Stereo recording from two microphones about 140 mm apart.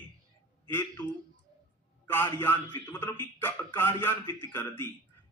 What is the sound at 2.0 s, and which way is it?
A man's voice, 15° left (ahead or behind).